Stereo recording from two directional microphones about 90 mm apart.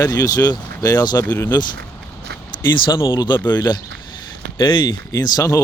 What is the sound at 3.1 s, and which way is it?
Speech, 55° left (ahead or behind).